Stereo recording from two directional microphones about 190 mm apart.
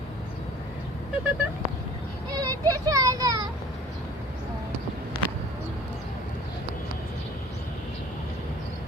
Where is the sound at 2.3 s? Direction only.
20° right (ahead or behind).